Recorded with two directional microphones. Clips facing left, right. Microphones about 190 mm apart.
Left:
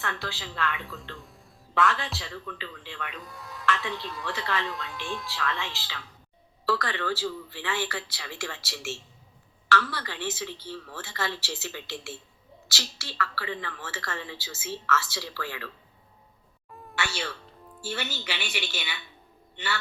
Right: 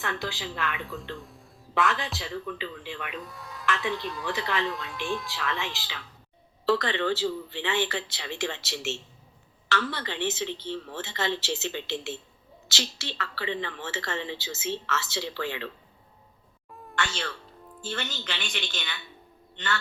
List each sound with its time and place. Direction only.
0.0 s speech: 15° right (ahead or behind)
0.8 s speech: centre (ahead or behind)
2.1 s speech: 15° right (ahead or behind)
3.2 s speech: centre (ahead or behind)
5.3 s speech: 15° right (ahead or behind)
16.7 s a sound: 5° left (ahead or behind)
17.7 s a woman's voice: 10° left (ahead or behind)